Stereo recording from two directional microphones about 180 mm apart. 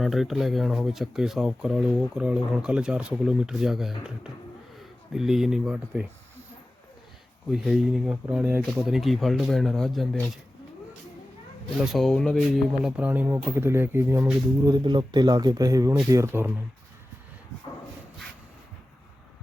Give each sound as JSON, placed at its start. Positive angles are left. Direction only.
{"t": 0.0, "sound": "speech", "side_deg": 0}
{"t": 7.5, "sound": "speech", "side_deg": 0}
{"t": 11.9, "sound": "a man's voice", "side_deg": 0}